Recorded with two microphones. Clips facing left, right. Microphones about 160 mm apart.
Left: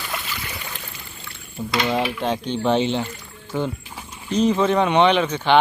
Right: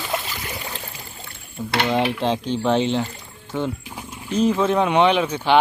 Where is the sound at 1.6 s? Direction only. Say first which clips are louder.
Right 1 dB; 5° left (ahead or behind).